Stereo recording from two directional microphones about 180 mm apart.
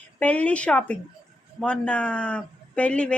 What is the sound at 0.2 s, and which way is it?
A woman's voice, 10° left (ahead or behind).